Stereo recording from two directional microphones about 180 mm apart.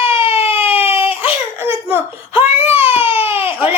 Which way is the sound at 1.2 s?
10° right (ahead or behind).